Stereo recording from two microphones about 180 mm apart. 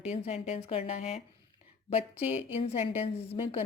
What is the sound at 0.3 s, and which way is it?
A woman's voice, 35° left (ahead or behind).